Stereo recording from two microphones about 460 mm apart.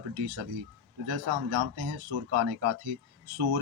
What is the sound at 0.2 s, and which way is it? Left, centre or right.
Speech, right.